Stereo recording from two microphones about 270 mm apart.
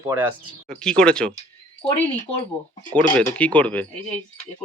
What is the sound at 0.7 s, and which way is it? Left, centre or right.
Speech, centre.